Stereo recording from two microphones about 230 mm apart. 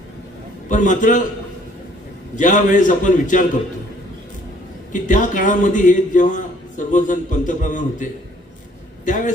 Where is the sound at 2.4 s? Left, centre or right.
Left.